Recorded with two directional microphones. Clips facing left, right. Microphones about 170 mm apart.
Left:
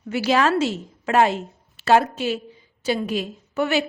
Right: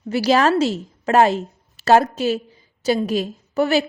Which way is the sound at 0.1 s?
35° right (ahead or behind).